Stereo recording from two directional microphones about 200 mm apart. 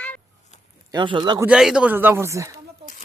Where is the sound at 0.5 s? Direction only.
35° left (ahead or behind).